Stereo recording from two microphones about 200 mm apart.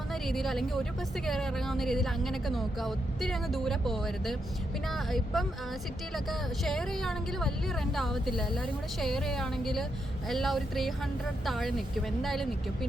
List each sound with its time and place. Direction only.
0.1 s a woman's voice: centre (ahead or behind)